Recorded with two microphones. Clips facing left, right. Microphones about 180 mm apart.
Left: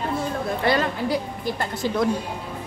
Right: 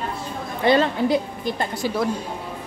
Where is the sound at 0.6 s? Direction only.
20° right (ahead or behind).